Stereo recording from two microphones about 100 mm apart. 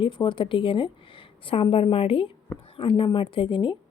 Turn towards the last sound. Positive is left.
turn(degrees=55)  # may be behind; listen again after turning